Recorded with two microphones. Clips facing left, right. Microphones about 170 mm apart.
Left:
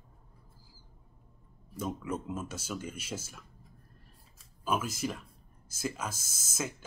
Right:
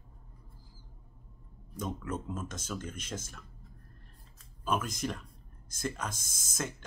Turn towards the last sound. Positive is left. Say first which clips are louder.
# left 1 dB
turn(degrees=5)  # may be behind; listen again after turning